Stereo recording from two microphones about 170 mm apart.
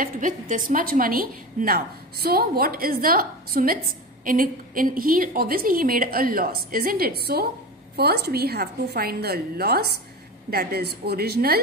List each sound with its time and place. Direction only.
0.0 s a woman's voice: 50° right (ahead or behind)